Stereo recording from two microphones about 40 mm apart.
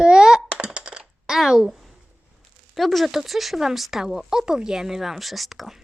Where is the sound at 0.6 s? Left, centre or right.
Right.